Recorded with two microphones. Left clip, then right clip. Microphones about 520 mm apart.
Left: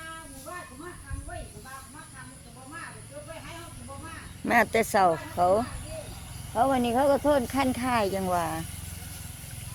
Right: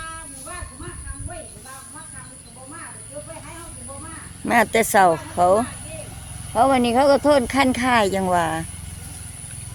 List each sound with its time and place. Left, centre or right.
4.4 s speech: left